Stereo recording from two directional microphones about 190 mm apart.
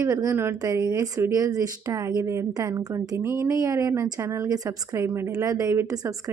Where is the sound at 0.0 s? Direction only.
15° right (ahead or behind).